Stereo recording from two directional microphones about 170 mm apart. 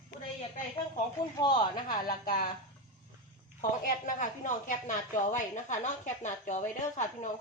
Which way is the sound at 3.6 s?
55° left (ahead or behind).